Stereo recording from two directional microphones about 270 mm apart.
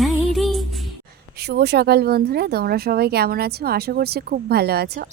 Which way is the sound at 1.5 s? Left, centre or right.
Right.